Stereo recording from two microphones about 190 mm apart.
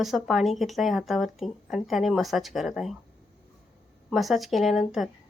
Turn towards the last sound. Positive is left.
turn(degrees=0)  # may be behind; listen again after turning